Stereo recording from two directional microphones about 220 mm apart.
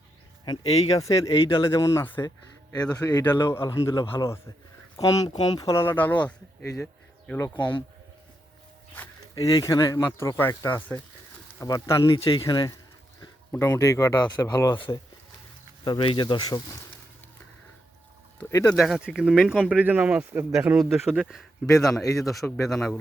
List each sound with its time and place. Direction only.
0.9 s speech: 15° left (ahead or behind)
9.3 s speech: 15° left (ahead or behind)
18.3 s speech: 10° left (ahead or behind)